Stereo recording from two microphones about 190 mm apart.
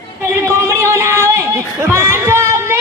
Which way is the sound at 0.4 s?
15° right (ahead or behind).